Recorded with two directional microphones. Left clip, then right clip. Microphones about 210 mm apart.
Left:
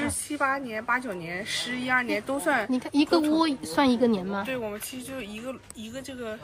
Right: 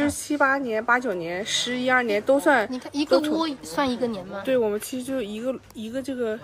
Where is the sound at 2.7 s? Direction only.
35° left (ahead or behind).